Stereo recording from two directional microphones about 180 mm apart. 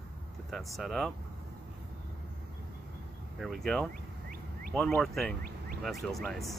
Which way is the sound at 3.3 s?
Centre (ahead or behind).